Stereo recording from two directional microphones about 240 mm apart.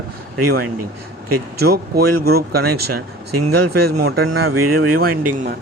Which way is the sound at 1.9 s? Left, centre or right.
Right.